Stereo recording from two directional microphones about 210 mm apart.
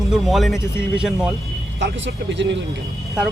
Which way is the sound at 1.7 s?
60° right (ahead or behind).